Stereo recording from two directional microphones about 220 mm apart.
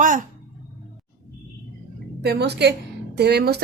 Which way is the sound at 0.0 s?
35° right (ahead or behind).